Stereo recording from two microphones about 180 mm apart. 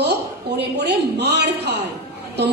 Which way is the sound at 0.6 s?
70° right (ahead or behind).